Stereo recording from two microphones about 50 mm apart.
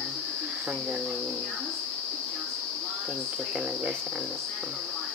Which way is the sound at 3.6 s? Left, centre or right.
Right.